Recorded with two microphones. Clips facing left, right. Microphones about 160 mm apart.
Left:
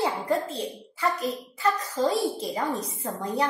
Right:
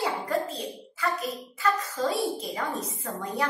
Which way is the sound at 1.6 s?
30° left (ahead or behind).